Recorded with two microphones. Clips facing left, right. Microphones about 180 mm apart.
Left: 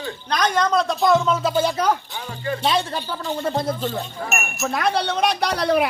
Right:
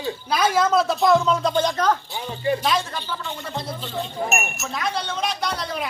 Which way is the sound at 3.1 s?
40° left (ahead or behind).